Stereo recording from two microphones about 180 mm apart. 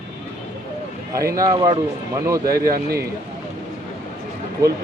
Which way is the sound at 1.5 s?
30° right (ahead or behind).